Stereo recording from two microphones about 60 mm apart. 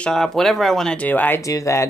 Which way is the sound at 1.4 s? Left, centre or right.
Left.